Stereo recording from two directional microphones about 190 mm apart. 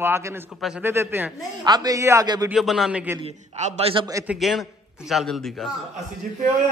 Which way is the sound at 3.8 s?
30° right (ahead or behind).